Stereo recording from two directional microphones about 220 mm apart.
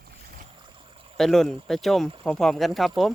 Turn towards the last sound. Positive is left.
turn(degrees=0)  # may be behind; listen again after turning